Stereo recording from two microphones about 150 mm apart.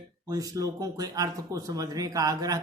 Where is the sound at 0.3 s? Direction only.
25° right (ahead or behind).